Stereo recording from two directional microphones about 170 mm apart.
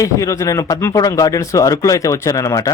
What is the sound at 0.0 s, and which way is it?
A man's voice, 20° left (ahead or behind).